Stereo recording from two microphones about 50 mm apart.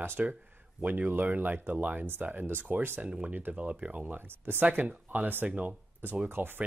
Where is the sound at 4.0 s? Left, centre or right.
Right.